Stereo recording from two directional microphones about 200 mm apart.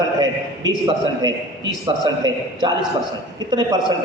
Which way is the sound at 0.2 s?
20° right (ahead or behind).